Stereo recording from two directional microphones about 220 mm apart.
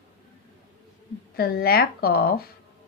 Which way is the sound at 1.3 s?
45° left (ahead or behind).